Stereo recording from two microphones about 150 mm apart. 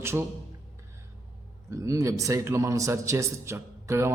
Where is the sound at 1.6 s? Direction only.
20° right (ahead or behind).